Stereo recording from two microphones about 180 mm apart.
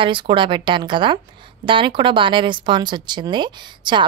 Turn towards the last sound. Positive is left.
turn(degrees=-25)  # may be behind; listen again after turning